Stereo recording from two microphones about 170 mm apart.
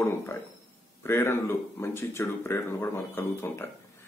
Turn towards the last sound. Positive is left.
turn(degrees=15)  # may be behind; listen again after turning